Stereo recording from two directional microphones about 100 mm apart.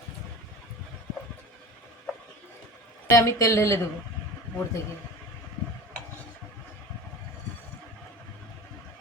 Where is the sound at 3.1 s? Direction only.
30° left (ahead or behind).